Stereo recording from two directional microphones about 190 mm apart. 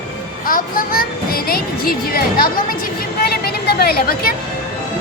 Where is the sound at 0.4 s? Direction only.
50° left (ahead or behind).